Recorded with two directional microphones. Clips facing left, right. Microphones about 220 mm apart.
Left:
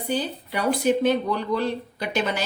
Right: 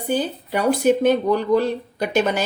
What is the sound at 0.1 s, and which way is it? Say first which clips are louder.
A woman's voice: right 5 dB; 50° right (ahead or behind).